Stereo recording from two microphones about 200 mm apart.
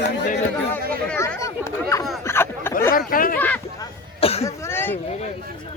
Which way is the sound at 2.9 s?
45° left (ahead or behind).